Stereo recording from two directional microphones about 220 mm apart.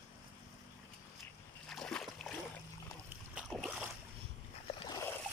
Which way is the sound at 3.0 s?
5° right (ahead or behind).